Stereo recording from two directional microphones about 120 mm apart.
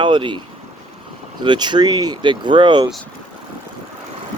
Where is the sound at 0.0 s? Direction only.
45° right (ahead or behind).